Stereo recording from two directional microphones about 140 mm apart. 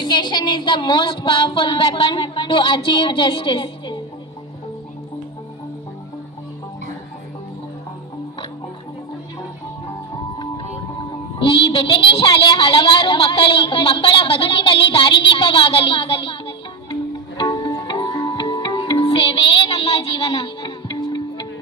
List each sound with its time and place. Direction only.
0.0 s speech: 35° left (ahead or behind)
10.3 s music: 30° left (ahead or behind)
11.3 s a woman's voice: 40° left (ahead or behind)
19.0 s child singing: 40° left (ahead or behind)